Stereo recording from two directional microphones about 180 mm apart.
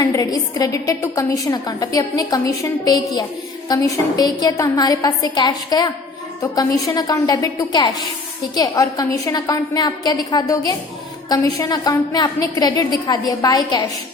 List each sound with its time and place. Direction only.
0.0 s a woman's voice: 20° left (ahead or behind)